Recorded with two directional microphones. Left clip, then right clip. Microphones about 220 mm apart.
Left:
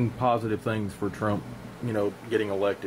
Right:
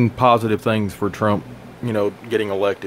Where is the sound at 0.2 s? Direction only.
40° right (ahead or behind).